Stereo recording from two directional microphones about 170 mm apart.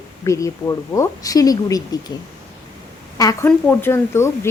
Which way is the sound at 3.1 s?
15° left (ahead or behind).